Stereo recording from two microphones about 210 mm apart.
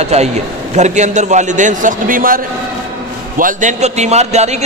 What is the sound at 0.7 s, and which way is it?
A man's voice, 35° right (ahead or behind).